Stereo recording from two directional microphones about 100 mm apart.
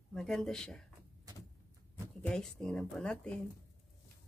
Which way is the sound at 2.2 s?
5° left (ahead or behind).